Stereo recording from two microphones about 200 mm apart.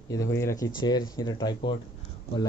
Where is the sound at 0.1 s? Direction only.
15° left (ahead or behind).